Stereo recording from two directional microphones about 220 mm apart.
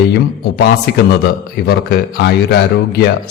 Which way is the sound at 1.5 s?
45° left (ahead or behind).